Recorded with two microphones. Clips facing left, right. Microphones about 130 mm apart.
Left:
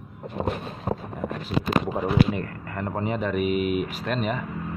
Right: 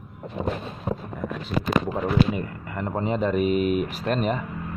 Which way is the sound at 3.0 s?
30° right (ahead or behind).